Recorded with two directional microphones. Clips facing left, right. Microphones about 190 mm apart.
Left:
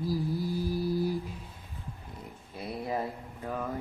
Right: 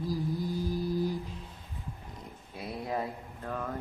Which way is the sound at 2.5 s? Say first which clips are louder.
Left 1 dB; centre (ahead or behind).